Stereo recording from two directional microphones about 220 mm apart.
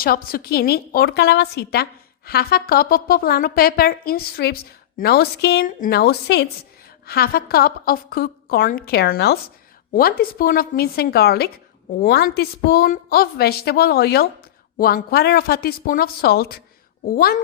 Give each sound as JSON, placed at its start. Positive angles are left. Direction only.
{"t": 0.0, "sound": "a woman's voice", "side_deg": 40}